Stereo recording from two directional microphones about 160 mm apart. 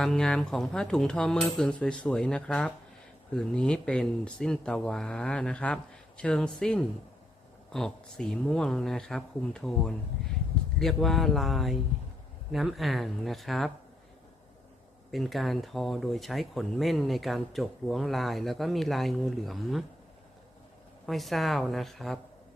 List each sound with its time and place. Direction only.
0.0 s speech: 5° left (ahead or behind)
15.1 s speech: centre (ahead or behind)
21.1 s speech: centre (ahead or behind)